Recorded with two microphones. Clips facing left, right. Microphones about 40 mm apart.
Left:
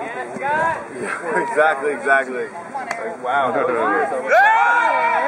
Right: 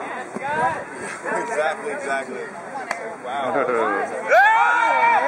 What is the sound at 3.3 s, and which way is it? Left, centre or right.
Speech, centre.